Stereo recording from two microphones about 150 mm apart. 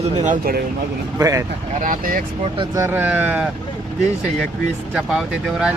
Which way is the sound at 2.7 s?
15° right (ahead or behind).